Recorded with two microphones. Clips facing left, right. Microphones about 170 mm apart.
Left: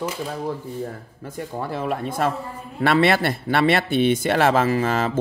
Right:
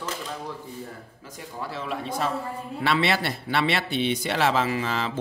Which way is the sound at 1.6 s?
50° left (ahead or behind).